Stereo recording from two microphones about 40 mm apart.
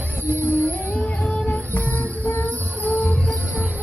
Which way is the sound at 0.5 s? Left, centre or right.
Right.